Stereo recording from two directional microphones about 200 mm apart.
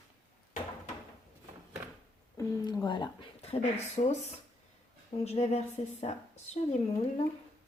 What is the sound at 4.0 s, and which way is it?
A woman's voice, 30° left (ahead or behind).